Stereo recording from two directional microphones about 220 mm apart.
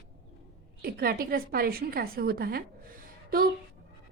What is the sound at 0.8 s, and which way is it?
A woman's voice, 40° right (ahead or behind).